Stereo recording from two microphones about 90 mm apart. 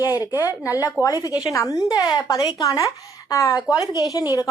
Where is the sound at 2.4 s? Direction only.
50° left (ahead or behind).